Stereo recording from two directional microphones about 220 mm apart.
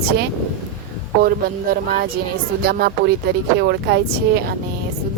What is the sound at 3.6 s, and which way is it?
Speech, 45° right (ahead or behind).